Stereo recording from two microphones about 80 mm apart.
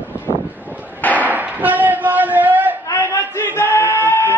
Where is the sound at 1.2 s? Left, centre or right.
Right.